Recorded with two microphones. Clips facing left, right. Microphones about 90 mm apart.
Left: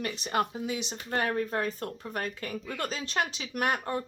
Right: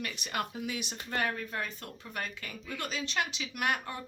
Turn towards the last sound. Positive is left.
turn(degrees=40)  # may be behind; listen again after turning